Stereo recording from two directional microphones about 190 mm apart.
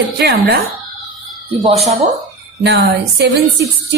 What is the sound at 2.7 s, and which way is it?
Speech, 60° right (ahead or behind).